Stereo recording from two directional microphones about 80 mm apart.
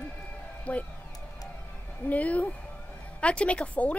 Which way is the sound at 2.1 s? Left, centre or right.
Centre.